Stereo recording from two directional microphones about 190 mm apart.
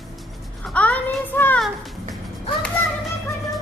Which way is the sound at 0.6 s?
5° left (ahead or behind).